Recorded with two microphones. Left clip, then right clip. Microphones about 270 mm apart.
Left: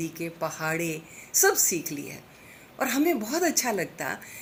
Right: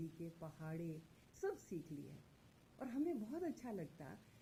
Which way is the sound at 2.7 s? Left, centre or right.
Centre.